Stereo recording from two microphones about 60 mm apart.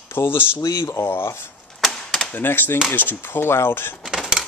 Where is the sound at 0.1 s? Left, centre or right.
Left.